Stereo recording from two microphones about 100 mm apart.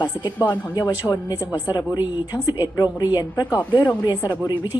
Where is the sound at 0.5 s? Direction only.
40° left (ahead or behind).